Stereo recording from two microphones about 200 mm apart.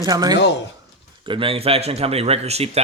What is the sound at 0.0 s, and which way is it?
A man's voice, 20° right (ahead or behind).